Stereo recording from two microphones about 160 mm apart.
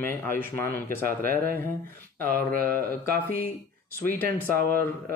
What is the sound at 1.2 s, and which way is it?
Speech, 65° right (ahead or behind).